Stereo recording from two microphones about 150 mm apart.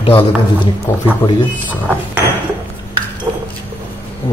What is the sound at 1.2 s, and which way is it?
Speech, 25° left (ahead or behind).